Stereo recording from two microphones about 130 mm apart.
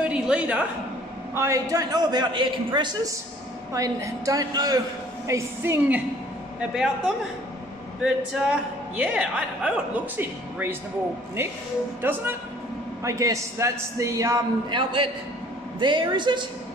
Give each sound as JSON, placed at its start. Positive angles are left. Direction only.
{"t": 0.0, "sound": "a sound", "side_deg": -10}
{"t": 1.3, "sound": "a man's voice", "side_deg": -25}
{"t": 3.7, "sound": "a man's voice", "side_deg": -25}
{"t": 6.6, "sound": "a man's voice", "side_deg": -5}
{"t": 8.0, "sound": "a man's voice", "side_deg": -5}
{"t": 12.0, "sound": "a man's voice", "side_deg": -15}
{"t": 14.7, "sound": "a man's voice", "side_deg": -40}